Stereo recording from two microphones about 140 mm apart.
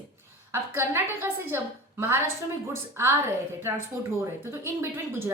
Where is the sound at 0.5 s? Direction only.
15° right (ahead or behind).